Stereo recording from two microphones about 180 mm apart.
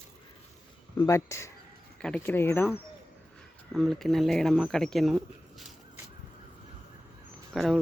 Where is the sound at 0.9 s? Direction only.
15° left (ahead or behind).